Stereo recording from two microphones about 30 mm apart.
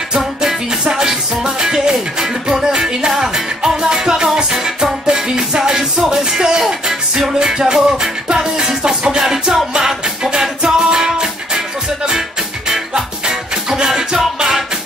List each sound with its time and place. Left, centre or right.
0.9 s music: right
12.6 s music: centre